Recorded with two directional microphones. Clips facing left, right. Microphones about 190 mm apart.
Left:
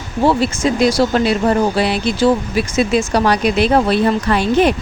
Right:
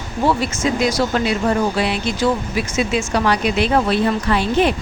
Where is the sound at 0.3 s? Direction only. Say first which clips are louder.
Left 3 dB; 30° left (ahead or behind).